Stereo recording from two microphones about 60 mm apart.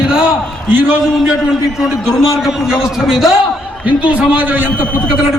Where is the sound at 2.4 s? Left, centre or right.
Centre.